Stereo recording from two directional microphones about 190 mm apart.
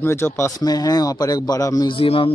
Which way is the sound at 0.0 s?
10° left (ahead or behind).